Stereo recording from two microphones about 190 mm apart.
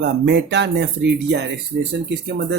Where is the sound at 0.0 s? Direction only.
60° right (ahead or behind).